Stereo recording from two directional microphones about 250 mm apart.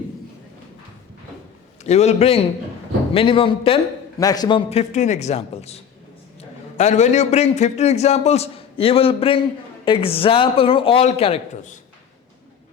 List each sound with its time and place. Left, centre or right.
1.8 s a man's voice: left